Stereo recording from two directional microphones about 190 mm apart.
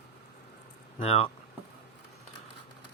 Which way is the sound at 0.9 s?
30° left (ahead or behind).